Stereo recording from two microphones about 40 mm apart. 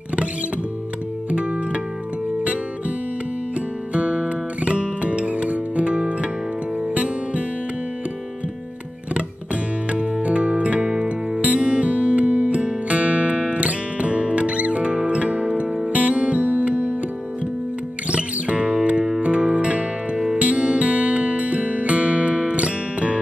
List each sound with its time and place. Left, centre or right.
1.3 s music: right
3.9 s music: right
9.8 s music: right
18.1 s music: right